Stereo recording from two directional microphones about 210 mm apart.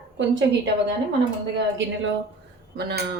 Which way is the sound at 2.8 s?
50° right (ahead or behind).